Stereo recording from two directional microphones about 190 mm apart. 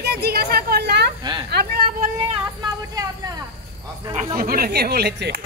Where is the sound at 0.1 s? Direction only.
55° right (ahead or behind).